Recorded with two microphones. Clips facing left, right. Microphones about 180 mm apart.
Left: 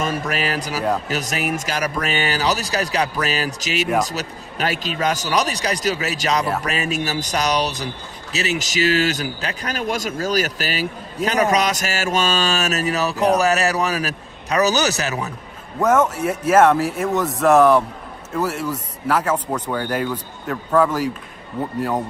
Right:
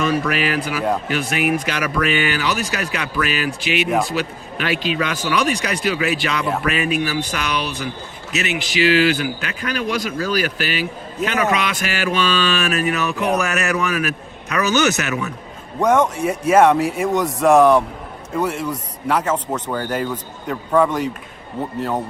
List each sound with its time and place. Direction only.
0.0 s a man's voice: 40° left (ahead or behind)
15.8 s speech: 5° left (ahead or behind)
20.5 s speech: centre (ahead or behind)